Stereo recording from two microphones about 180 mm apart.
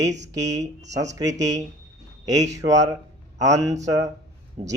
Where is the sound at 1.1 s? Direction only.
20° right (ahead or behind).